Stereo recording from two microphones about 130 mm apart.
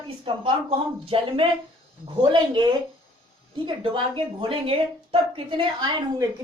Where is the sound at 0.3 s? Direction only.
45° right (ahead or behind).